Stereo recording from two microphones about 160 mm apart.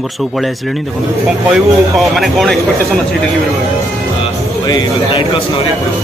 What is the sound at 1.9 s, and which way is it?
Speech, centre (ahead or behind).